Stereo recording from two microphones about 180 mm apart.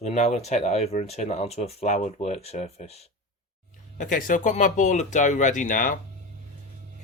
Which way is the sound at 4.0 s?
45° left (ahead or behind).